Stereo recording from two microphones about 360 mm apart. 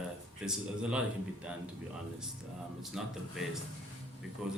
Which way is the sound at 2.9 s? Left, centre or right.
Centre.